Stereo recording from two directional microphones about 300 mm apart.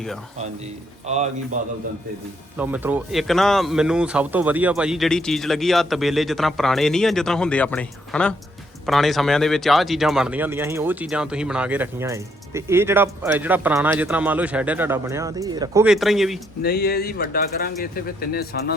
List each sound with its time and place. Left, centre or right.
1.0 s a man's voice: right
2.6 s speech: centre
16.6 s speech: left